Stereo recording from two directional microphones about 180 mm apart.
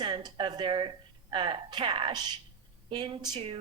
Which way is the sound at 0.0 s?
25° right (ahead or behind).